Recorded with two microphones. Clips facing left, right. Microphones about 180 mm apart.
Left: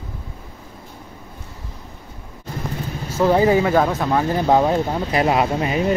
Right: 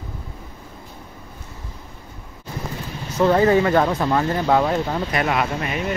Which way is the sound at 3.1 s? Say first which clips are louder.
Even; 10° left (ahead or behind).